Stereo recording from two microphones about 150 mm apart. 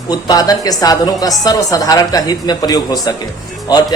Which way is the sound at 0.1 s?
25° left (ahead or behind).